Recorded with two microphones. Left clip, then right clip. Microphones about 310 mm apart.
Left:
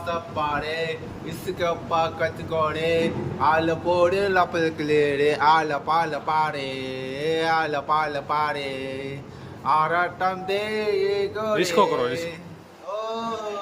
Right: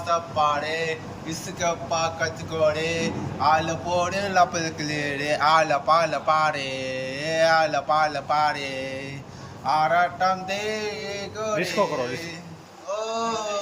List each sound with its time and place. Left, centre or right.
0.1 s mantra: centre
1.5 s speech: centre
9.6 s mantra: centre
13.0 s a sound: centre